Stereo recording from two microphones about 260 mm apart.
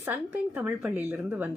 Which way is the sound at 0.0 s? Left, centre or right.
Centre.